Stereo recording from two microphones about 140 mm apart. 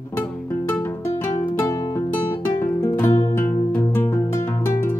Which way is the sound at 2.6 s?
15° left (ahead or behind).